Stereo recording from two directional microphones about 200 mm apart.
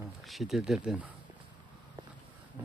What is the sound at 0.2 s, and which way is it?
Speech, centre (ahead or behind).